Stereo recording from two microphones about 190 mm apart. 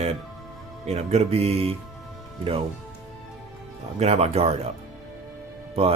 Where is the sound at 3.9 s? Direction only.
35° right (ahead or behind).